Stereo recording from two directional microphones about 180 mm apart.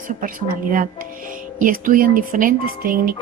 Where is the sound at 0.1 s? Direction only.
50° right (ahead or behind).